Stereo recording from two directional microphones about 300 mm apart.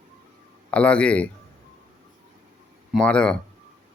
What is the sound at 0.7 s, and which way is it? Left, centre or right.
Speech, centre.